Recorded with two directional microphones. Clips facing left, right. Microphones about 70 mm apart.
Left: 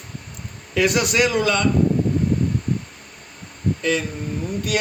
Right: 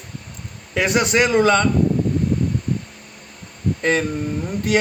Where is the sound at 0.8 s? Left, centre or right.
Right.